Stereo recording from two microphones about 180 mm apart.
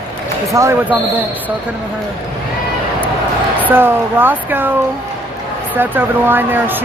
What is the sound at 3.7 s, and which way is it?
Speech, 10° right (ahead or behind).